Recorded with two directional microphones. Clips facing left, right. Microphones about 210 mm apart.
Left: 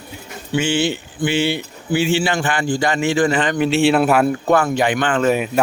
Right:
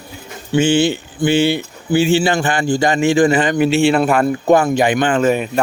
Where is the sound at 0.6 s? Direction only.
45° right (ahead or behind).